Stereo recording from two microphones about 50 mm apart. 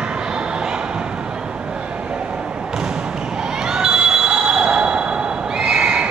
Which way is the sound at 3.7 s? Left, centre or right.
Centre.